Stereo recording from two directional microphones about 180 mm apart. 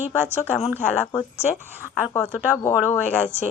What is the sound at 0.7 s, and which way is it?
Speech, 15° left (ahead or behind).